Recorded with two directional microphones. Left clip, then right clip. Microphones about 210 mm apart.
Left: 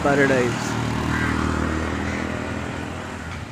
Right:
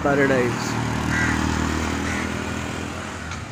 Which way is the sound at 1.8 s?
55° right (ahead or behind).